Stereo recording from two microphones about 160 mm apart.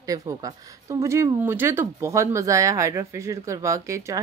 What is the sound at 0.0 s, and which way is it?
Speech, 20° right (ahead or behind).